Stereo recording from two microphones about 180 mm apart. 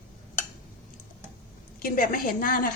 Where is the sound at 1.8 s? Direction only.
55° left (ahead or behind).